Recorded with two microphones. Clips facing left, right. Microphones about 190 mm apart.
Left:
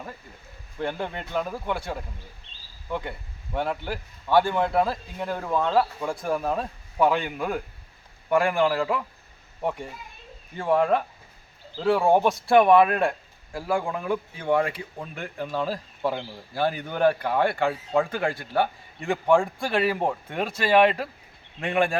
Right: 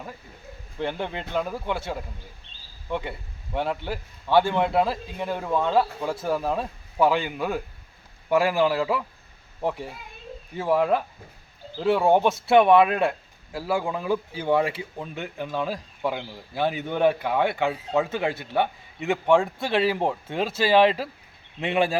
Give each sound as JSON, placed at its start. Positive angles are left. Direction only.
{"t": 0.8, "sound": "a man's voice", "side_deg": 0}
{"t": 20.6, "sound": "speech", "side_deg": -25}